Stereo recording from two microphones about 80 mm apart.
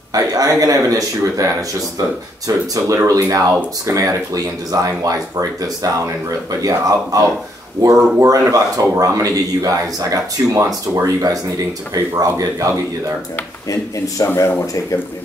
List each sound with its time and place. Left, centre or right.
0.1 s speech: right
13.7 s speech: left
14.2 s speech: left